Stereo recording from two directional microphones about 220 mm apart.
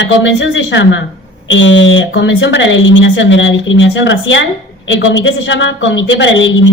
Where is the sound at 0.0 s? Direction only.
55° left (ahead or behind).